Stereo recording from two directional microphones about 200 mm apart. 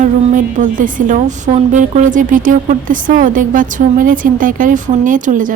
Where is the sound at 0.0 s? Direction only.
40° right (ahead or behind).